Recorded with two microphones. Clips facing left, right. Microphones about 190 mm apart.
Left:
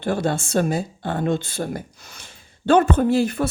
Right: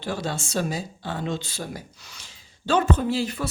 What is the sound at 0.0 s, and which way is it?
Speech, 55° left (ahead or behind).